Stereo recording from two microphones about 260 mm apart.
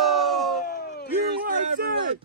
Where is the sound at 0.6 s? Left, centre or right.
Left.